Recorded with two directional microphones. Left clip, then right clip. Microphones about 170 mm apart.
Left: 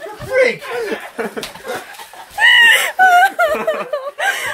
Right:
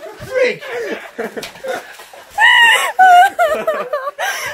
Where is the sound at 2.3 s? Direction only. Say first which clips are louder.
Even; 10° left (ahead or behind).